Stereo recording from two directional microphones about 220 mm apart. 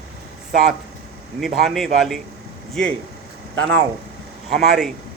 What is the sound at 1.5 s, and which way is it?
Speech, centre (ahead or behind).